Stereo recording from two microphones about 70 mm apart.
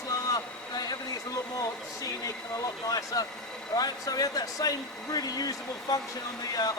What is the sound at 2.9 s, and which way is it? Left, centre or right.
Speech, left.